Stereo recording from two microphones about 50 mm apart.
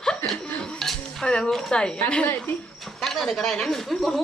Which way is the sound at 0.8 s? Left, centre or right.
Centre.